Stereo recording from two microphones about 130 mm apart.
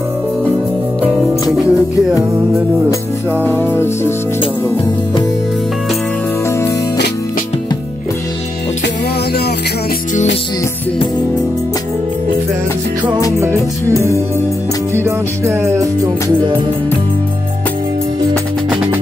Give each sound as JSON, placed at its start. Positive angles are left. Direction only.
{"t": 1.5, "sound": "music", "side_deg": -5}
{"t": 2.1, "sound": "music", "side_deg": -25}
{"t": 3.4, "sound": "music", "side_deg": 15}
{"t": 13.4, "sound": "music", "side_deg": -20}
{"t": 15.0, "sound": "music", "side_deg": -20}
{"t": 18.7, "sound": "music", "side_deg": -10}